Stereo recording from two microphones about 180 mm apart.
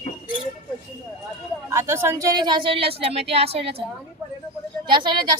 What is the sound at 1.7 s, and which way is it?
Speech, 15° right (ahead or behind).